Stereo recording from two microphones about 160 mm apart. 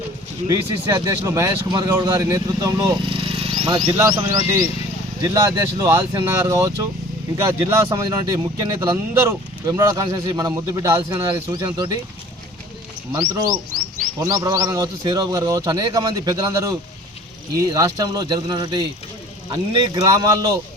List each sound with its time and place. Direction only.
0.4 s speech: 25° right (ahead or behind)
3.3 s a sound: 35° right (ahead or behind)
3.9 s speech: 20° right (ahead or behind)
7.7 s speech: 15° right (ahead or behind)
13.1 s speech: 25° right (ahead or behind)